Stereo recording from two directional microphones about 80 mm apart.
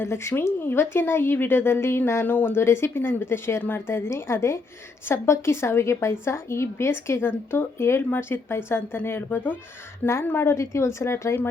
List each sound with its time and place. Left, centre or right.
0.0 s speech: left
2.2 s a woman's voice: left